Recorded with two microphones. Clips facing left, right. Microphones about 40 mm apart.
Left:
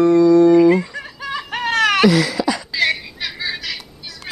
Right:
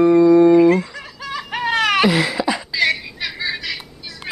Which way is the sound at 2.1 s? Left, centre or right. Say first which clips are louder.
Left 1 dB; right.